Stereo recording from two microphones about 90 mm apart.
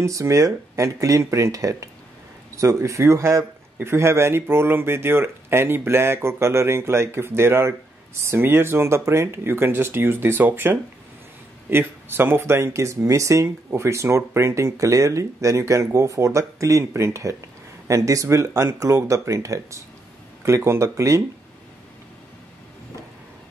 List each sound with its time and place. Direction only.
0.0 s a man's voice: 35° right (ahead or behind)